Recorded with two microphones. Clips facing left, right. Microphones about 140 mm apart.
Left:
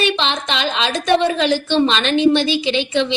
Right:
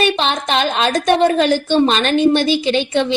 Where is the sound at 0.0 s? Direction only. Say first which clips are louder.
Right 2 dB; 45° right (ahead or behind).